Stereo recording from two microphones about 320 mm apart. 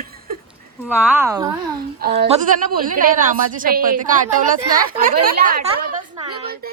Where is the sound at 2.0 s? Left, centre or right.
Right.